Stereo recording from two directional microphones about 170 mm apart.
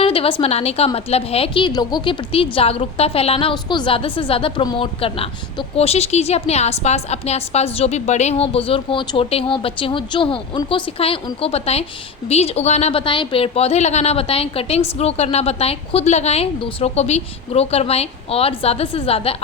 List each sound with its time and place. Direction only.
0.0 s a woman's voice: 35° left (ahead or behind)